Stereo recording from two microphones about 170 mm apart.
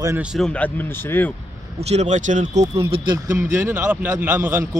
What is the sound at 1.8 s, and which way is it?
Speech, 40° right (ahead or behind).